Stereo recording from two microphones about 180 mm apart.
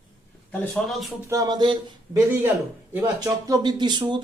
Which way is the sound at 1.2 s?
20° right (ahead or behind).